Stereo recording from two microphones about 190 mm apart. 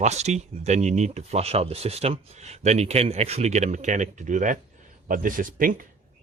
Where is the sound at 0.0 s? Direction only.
35° right (ahead or behind).